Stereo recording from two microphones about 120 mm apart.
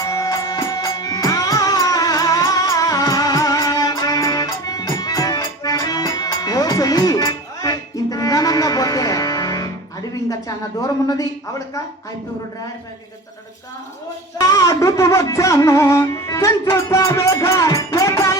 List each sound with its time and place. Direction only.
0.0 s music: 30° left (ahead or behind)
10.8 s speech: 30° left (ahead or behind)
14.3 s music: 30° left (ahead or behind)